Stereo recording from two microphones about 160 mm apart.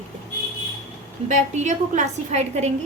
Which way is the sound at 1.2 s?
50° right (ahead or behind).